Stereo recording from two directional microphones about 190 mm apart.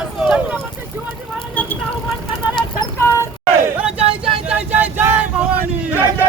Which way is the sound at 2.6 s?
20° left (ahead or behind).